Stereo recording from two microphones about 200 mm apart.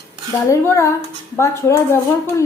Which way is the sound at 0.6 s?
15° left (ahead or behind).